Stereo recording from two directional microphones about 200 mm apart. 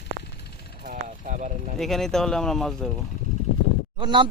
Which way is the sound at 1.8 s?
Centre (ahead or behind).